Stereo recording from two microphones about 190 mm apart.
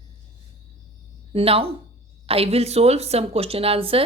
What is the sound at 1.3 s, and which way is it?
A woman's voice, 30° right (ahead or behind).